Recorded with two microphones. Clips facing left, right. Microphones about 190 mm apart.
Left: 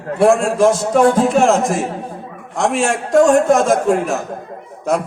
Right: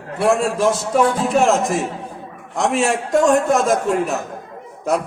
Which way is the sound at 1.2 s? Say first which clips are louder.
Left 3 dB; centre (ahead or behind).